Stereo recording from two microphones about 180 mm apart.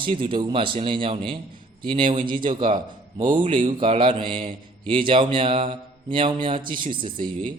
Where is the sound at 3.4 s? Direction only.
30° right (ahead or behind).